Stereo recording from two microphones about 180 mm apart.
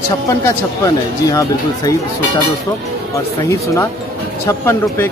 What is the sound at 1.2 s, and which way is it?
Speech, 20° left (ahead or behind).